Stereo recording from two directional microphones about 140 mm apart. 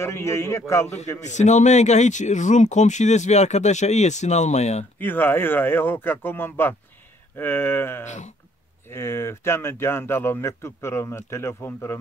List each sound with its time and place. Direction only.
0.0 s a man's voice: 20° left (ahead or behind)
1.2 s speech: 60° left (ahead or behind)
4.9 s a man's voice: 15° left (ahead or behind)